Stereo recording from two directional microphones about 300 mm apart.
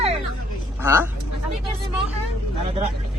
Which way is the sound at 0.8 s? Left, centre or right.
Centre.